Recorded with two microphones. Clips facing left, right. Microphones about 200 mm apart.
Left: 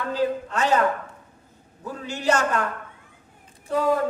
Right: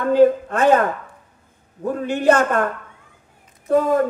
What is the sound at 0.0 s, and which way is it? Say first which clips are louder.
Speech: right 11 dB; 55° right (ahead or behind).